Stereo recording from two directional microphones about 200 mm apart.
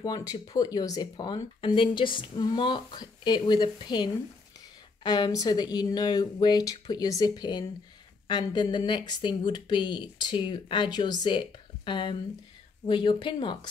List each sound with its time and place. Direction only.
0.0 s speech: 20° left (ahead or behind)